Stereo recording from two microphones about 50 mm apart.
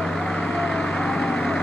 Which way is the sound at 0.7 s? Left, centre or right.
Centre.